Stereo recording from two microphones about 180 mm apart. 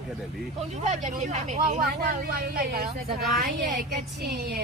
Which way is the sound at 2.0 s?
55° right (ahead or behind).